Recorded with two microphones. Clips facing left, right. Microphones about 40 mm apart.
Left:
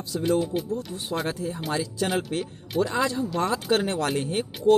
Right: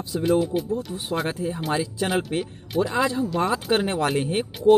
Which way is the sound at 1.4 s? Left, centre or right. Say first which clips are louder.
Right 3 dB; right.